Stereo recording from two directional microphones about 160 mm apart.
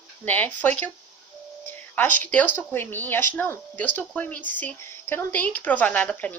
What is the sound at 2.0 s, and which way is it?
Speech, 10° left (ahead or behind).